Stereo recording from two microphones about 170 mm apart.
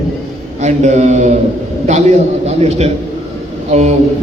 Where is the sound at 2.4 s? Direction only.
40° right (ahead or behind).